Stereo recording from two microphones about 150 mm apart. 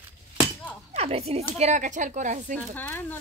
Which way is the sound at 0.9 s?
45° right (ahead or behind).